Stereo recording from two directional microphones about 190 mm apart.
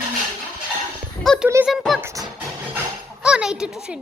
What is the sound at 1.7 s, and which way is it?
Speech, centre (ahead or behind).